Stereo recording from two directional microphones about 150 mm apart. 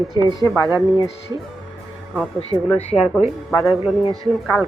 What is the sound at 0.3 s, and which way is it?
Speech, 25° left (ahead or behind).